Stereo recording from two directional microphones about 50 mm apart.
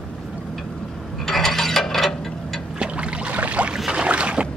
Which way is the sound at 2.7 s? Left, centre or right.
Right.